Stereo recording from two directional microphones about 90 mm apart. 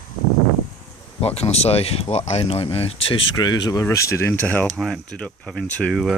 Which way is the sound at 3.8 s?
35° left (ahead or behind).